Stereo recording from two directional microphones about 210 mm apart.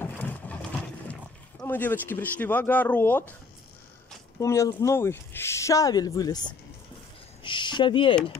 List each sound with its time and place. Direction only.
0.0 s boat: 10° left (ahead or behind)
1.6 s speech: 10° left (ahead or behind)
4.4 s speech: 15° left (ahead or behind)